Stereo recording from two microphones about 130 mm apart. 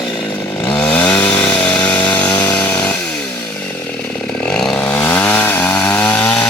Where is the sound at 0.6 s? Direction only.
10° left (ahead or behind).